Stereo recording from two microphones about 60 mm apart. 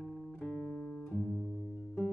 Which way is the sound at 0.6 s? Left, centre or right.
Centre.